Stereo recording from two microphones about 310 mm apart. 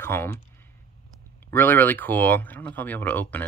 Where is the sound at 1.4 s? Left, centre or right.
Centre.